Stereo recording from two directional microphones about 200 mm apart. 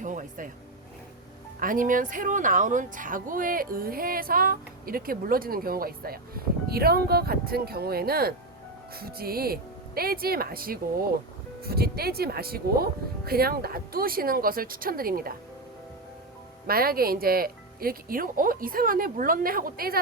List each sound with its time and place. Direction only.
0.0 s vehicle: 40° right (ahead or behind)
1.5 s speech: 45° right (ahead or behind)
16.6 s speech: 50° right (ahead or behind)